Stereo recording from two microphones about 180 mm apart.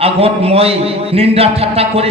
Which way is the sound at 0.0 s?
35° right (ahead or behind).